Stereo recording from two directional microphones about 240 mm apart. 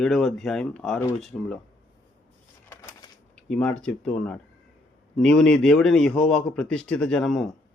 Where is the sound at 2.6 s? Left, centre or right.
Centre.